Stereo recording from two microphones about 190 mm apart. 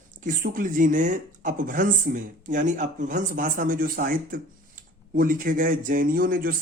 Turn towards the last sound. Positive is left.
turn(degrees=-50)  # may be behind; listen again after turning